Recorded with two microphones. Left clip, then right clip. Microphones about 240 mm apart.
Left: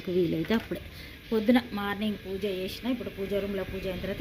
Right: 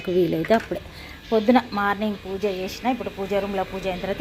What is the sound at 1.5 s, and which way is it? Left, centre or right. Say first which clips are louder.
Speech: right 7 dB; centre.